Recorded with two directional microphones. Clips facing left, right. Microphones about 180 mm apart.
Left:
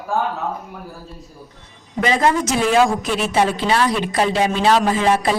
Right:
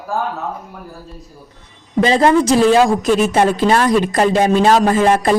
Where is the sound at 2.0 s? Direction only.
30° right (ahead or behind).